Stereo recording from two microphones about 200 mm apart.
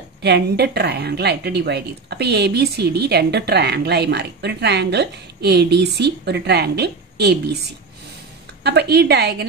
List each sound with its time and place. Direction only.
0.2 s a woman's voice: 55° right (ahead or behind)
8.6 s a woman's voice: 55° right (ahead or behind)